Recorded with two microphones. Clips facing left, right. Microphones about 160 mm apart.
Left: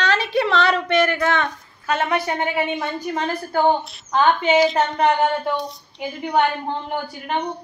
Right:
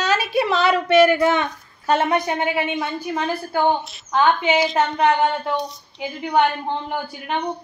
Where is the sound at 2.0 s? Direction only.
20° right (ahead or behind).